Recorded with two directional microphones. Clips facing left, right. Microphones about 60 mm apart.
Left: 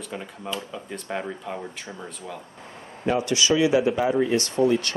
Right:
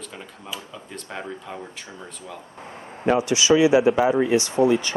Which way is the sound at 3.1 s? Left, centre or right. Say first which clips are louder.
Right 3 dB; right.